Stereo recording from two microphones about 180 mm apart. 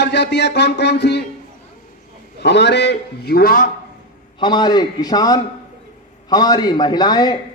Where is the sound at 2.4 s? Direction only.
70° left (ahead or behind); by 3.7 s 50° left (ahead or behind).